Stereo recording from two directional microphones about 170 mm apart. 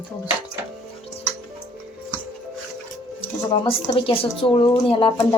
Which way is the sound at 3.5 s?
25° left (ahead or behind).